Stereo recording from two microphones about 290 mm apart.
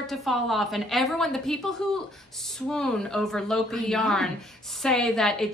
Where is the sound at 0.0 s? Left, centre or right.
Centre.